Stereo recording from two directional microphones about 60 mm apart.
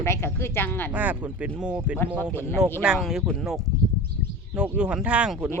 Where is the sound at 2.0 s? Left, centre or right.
Left.